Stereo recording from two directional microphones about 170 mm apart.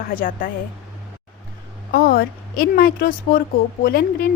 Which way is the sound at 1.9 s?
60° left (ahead or behind).